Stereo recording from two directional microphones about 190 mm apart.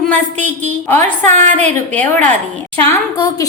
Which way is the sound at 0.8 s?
10° left (ahead or behind).